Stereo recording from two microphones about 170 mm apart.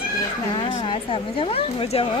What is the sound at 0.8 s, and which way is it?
A woman's voice, 30° left (ahead or behind).